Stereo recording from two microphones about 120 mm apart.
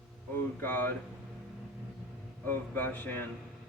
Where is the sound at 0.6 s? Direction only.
15° left (ahead or behind).